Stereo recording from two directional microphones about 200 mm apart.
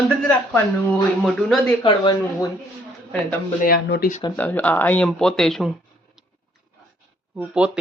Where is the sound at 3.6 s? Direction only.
50° left (ahead or behind).